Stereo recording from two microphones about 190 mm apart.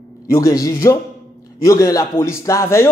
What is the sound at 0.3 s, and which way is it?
Speech, 20° left (ahead or behind).